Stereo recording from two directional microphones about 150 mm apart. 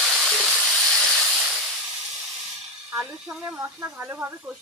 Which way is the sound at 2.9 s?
10° right (ahead or behind).